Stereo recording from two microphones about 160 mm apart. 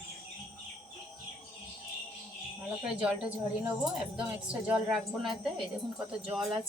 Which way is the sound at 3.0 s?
5° right (ahead or behind).